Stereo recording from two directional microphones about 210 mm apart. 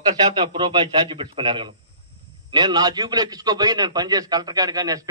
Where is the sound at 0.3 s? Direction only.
20° right (ahead or behind).